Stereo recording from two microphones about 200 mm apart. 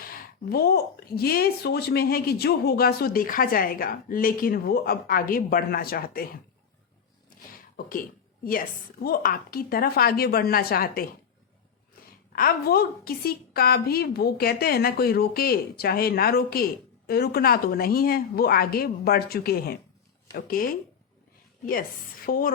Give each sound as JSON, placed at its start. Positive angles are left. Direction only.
{"t": 0.0, "sound": "speech", "side_deg": 45}
{"t": 9.0, "sound": "speech", "side_deg": 45}
{"t": 12.3, "sound": "speech", "side_deg": 45}
{"t": 21.7, "sound": "speech", "side_deg": 45}